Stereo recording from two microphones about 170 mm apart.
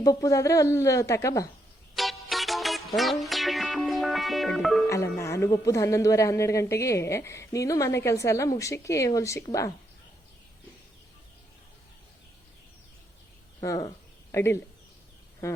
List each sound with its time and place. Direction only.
0.0 s a woman's voice: 20° left (ahead or behind)
2.0 s music: centre (ahead or behind)
4.9 s speech: 20° left (ahead or behind)
13.6 s a woman's voice: 20° left (ahead or behind)